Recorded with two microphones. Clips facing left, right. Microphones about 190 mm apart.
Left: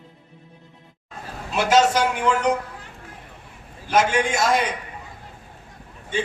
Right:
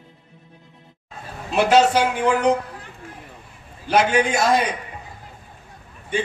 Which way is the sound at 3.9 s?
35° right (ahead or behind).